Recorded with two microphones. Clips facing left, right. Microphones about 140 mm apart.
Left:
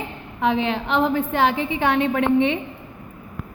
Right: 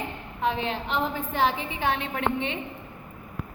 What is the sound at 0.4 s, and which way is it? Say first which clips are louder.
A woman's voice: left 6 dB; 75° left (ahead or behind).